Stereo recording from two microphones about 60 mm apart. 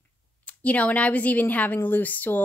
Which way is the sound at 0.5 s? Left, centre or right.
Left.